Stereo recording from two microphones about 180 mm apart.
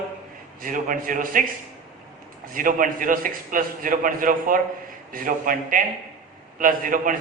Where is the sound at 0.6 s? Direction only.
50° right (ahead or behind).